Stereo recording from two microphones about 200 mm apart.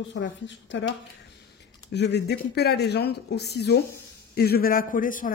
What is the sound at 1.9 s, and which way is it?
A man's voice, 60° left (ahead or behind).